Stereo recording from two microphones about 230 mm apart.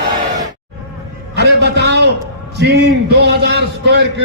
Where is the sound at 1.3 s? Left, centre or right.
Right.